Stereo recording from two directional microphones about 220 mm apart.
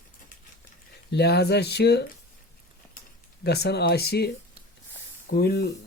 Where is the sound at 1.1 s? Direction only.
50° left (ahead or behind).